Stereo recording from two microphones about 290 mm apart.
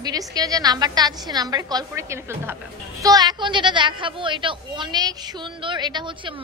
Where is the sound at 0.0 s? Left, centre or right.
Centre.